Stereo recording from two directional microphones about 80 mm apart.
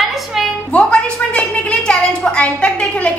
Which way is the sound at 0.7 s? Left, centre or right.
Centre.